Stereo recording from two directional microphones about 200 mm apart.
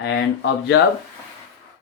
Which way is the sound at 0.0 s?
65° left (ahead or behind).